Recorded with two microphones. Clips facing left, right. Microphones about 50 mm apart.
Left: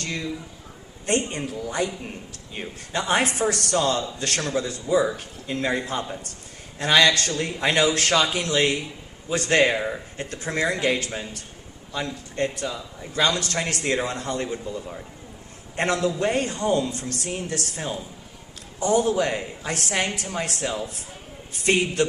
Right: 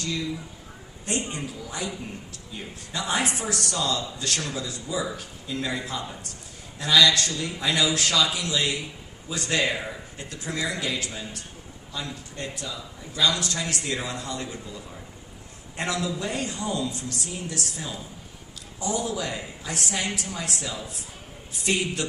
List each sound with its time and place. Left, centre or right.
1.0 s a woman's voice: left